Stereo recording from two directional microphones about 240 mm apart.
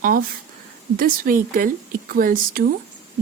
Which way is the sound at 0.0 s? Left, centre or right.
Right.